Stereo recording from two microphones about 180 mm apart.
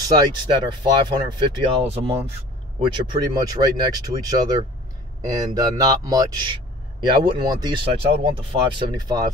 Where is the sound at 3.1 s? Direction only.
20° right (ahead or behind).